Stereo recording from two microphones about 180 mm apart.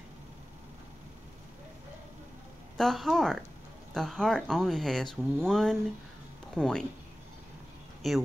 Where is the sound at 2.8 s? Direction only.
Centre (ahead or behind).